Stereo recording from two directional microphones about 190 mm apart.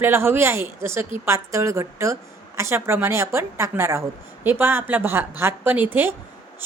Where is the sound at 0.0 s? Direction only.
10° right (ahead or behind).